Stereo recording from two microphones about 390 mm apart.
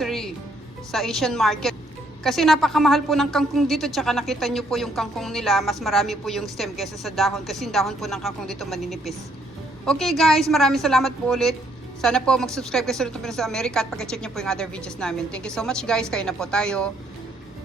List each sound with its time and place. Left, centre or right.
0.0 s music: centre
0.9 s a woman's voice: centre